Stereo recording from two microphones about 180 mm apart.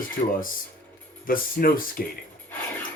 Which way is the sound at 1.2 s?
55° left (ahead or behind).